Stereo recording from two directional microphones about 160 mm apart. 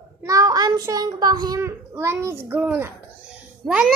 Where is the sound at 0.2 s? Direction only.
20° right (ahead or behind).